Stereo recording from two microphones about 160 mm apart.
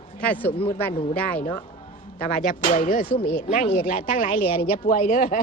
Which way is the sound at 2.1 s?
60° left (ahead or behind).